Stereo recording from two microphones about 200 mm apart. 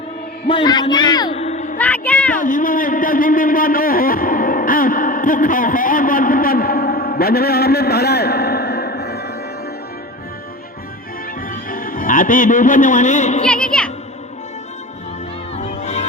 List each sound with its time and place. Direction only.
0.4 s a man's voice: 20° left (ahead or behind)
1.4 s a sound: 35° left (ahead or behind)
1.8 s a sound: 5° left (ahead or behind)
2.4 s a man's voice: 40° left (ahead or behind)
11.3 s music: 45° left (ahead or behind)
13.7 s music: 5° left (ahead or behind)
15.5 s music: 35° left (ahead or behind)